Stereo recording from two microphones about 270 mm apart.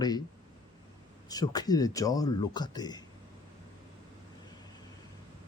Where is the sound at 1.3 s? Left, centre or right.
Centre.